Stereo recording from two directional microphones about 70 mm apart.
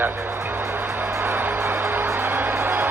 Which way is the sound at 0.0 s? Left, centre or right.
Right.